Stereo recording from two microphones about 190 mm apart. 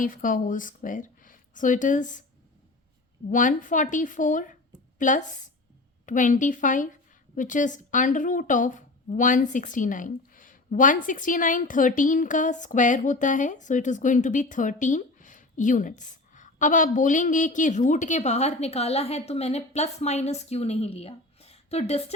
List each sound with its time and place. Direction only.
0.0 s speech: 45° left (ahead or behind)
3.2 s a woman's voice: 45° left (ahead or behind)